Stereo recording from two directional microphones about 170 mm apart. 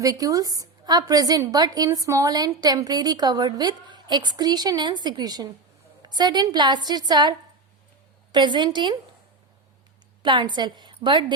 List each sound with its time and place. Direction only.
0.0 s a woman's voice: 20° right (ahead or behind)
10.2 s a woman's voice: 25° right (ahead or behind)